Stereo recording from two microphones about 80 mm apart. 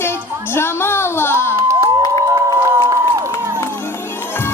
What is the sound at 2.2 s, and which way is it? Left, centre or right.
Music, right.